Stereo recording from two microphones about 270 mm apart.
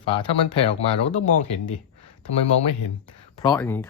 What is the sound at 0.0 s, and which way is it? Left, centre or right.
Speech, centre.